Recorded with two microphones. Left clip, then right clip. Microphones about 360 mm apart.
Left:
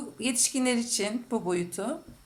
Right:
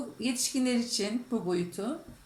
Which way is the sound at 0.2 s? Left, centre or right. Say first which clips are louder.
Left 3 dB; centre.